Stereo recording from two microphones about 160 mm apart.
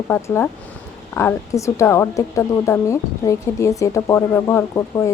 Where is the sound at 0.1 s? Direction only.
10° left (ahead or behind).